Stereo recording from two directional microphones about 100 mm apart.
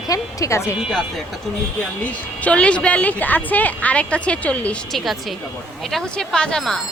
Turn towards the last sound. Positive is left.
turn(degrees=5)  # may be behind; listen again after turning